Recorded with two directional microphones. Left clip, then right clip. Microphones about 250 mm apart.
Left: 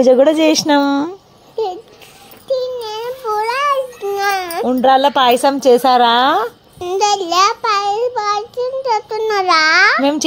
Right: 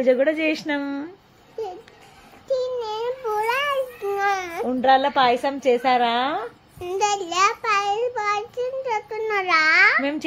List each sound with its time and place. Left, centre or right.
0.0 s a woman's voice: left
2.5 s a sound: centre
4.6 s a woman's voice: left
6.8 s child singing: centre